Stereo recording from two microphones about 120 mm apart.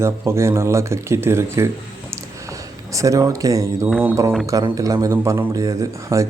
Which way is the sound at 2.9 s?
25° right (ahead or behind).